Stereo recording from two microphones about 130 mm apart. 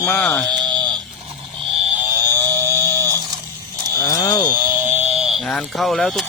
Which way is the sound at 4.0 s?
25° left (ahead or behind).